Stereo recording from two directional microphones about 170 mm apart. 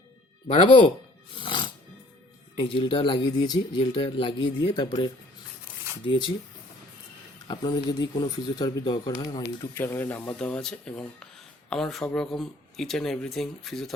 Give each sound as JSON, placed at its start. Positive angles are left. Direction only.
{"t": 0.4, "sound": "speech", "side_deg": 35}
{"t": 1.4, "sound": "music", "side_deg": 30}
{"t": 2.6, "sound": "speech", "side_deg": 30}
{"t": 7.4, "sound": "speech", "side_deg": 25}
{"t": 9.7, "sound": "speech", "side_deg": 15}